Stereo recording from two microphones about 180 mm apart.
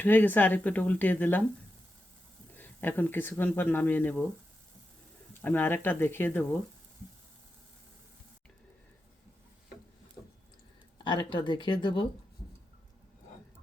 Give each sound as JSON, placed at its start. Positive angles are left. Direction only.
{"t": 0.0, "sound": "speech", "side_deg": 10}
{"t": 2.6, "sound": "speech", "side_deg": 10}
{"t": 5.3, "sound": "speech", "side_deg": 10}
{"t": 10.9, "sound": "speech", "side_deg": 25}